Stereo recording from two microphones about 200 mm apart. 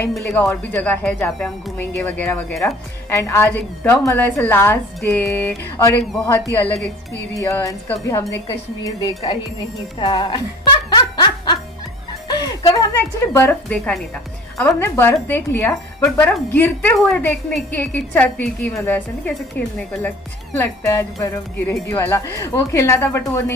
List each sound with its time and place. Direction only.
0.0 s speech: 5° left (ahead or behind); by 10.4 s 25° left (ahead or behind)
11.0 s snicker: 20° left (ahead or behind)
12.3 s music: 20° left (ahead or behind)
13.3 s speech: 10° left (ahead or behind)